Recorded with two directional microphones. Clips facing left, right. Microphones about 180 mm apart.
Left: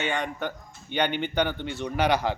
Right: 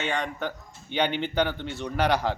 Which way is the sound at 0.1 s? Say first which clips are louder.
Even; centre (ahead or behind).